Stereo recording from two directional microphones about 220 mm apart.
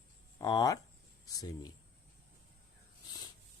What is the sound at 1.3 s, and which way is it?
Speech, 15° left (ahead or behind).